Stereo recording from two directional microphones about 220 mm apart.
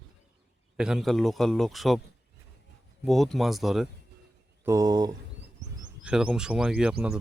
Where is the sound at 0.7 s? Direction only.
5° right (ahead or behind).